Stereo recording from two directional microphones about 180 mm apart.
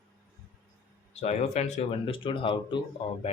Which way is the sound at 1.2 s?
40° left (ahead or behind).